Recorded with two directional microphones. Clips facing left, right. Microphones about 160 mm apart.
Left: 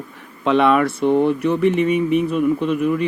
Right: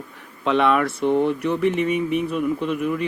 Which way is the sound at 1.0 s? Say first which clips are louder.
Left 3 dB; 35° left (ahead or behind).